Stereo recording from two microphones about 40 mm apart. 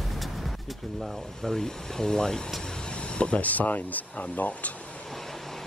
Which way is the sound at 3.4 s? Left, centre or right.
Left.